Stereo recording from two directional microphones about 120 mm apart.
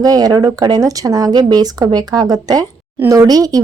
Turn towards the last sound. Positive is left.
turn(degrees=-30)  # may be behind; listen again after turning